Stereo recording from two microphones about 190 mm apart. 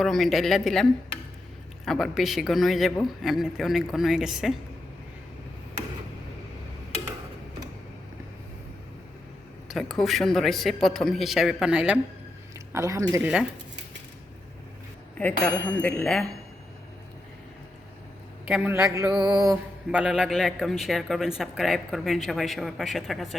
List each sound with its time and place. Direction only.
0.0 s a man's voice: centre (ahead or behind)
9.6 s a man's voice: centre (ahead or behind)
12.7 s speech: 15° right (ahead or behind)
15.2 s speech: 10° left (ahead or behind)
18.4 s speech: 5° right (ahead or behind)
19.9 s a man's voice: 5° right (ahead or behind)